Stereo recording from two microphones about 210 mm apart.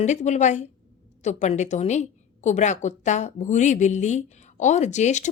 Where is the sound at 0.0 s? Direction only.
35° left (ahead or behind).